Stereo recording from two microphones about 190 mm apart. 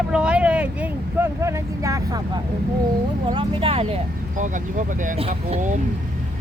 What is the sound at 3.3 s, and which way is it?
Speech, 30° right (ahead or behind).